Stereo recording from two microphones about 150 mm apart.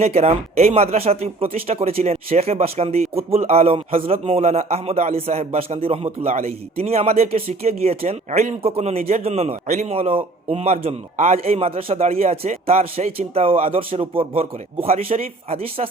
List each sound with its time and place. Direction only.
0.0 s speech: 45° right (ahead or behind)